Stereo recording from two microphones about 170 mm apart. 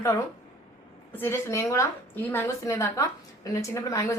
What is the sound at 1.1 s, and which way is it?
A woman's voice, 15° left (ahead or behind).